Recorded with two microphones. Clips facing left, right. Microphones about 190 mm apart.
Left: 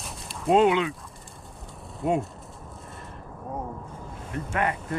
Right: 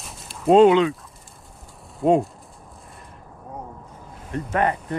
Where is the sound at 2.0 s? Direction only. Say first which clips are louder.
Right 7 dB; 30° right (ahead or behind).